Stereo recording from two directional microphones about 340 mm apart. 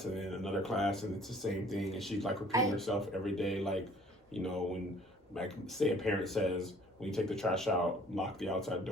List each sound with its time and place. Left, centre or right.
0.0 s speech: centre